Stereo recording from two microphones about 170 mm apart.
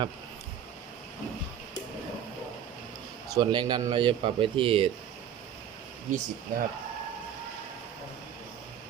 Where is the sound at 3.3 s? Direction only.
25° right (ahead or behind).